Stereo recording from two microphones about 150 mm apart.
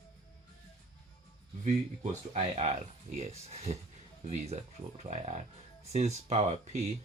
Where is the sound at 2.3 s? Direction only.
45° right (ahead or behind).